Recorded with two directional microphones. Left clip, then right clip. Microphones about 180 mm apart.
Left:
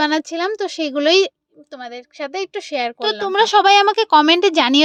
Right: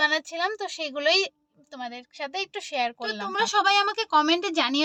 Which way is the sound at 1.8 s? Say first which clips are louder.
Left 6 dB; 20° left (ahead or behind).